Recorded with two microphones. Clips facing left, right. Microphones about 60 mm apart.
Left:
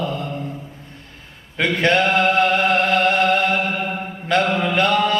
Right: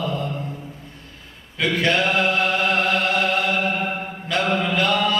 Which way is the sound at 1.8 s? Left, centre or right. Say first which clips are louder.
Left 4 dB; left.